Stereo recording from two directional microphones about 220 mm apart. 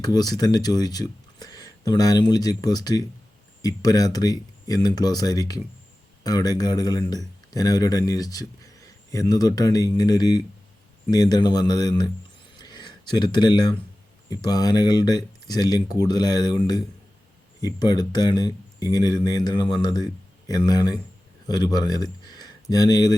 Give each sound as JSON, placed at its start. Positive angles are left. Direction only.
{"t": 0.0, "sound": "speech", "side_deg": 15}
{"t": 12.5, "sound": "a sound", "side_deg": 20}
{"t": 14.3, "sound": "speech", "side_deg": 15}
{"t": 17.7, "sound": "speech", "side_deg": 20}